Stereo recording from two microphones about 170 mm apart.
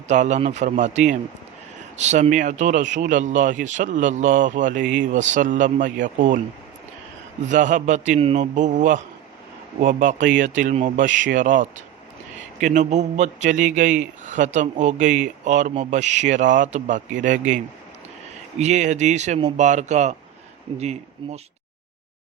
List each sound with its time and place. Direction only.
0.1 s a man's voice: 45° right (ahead or behind)
7.4 s a man's voice: 45° right (ahead or behind)
11.1 s speech: 90° right
11.3 s a man's voice: 50° right (ahead or behind)
18.6 s a man's voice: 45° right (ahead or behind)